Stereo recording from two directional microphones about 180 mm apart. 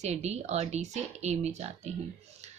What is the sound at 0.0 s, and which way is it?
A woman's voice, 40° right (ahead or behind).